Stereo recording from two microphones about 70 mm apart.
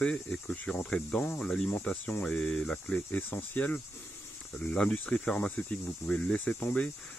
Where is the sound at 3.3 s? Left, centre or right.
Left.